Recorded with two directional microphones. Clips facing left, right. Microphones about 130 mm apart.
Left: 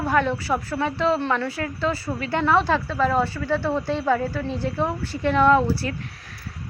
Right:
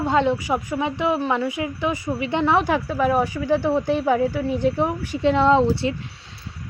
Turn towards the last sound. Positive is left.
turn(degrees=-25)  # may be behind; listen again after turning